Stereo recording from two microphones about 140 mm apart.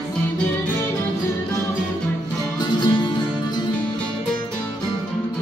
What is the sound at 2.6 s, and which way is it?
Music, 35° left (ahead or behind).